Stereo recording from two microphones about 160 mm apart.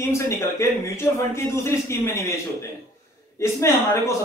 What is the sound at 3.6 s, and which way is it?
Speech, 15° left (ahead or behind).